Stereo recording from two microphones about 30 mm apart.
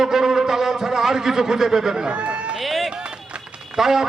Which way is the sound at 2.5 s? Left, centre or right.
Centre.